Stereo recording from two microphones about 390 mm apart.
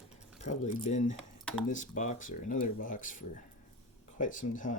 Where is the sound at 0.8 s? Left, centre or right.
Centre.